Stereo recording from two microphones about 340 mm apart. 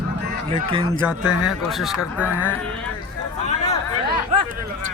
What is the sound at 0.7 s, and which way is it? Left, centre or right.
Speech, centre.